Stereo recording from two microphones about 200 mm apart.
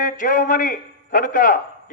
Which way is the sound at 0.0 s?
40° left (ahead or behind).